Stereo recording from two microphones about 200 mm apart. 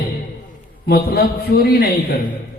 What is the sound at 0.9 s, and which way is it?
A man's voice, 50° left (ahead or behind).